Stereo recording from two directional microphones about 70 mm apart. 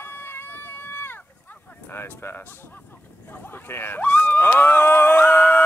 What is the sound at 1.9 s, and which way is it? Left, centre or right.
Speech, left.